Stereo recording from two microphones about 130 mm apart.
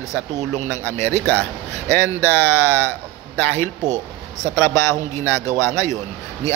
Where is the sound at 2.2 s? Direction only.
15° left (ahead or behind).